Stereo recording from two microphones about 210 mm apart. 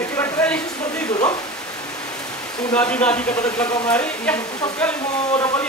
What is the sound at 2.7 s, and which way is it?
Speech, 5° left (ahead or behind).